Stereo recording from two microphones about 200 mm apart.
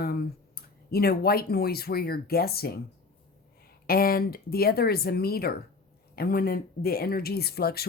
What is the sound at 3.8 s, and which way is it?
Speech, 50° left (ahead or behind).